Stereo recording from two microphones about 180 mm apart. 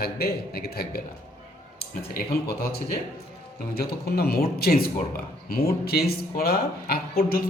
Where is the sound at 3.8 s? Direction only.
60° left (ahead or behind).